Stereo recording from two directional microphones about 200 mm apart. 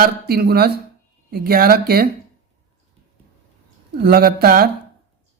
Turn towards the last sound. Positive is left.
turn(degrees=-50)  # may be behind; listen again after turning